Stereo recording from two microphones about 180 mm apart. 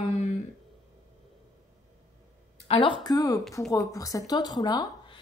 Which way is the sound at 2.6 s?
30° left (ahead or behind).